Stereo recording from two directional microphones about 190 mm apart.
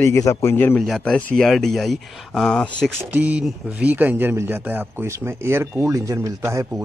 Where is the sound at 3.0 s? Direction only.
5° right (ahead or behind).